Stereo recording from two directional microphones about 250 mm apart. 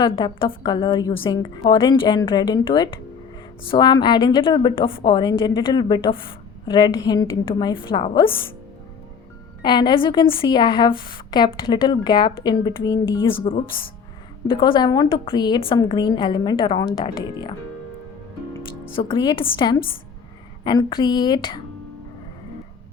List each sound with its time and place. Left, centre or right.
0.0 s a woman's voice: centre
9.6 s a woman's voice: centre
18.9 s a woman's voice: left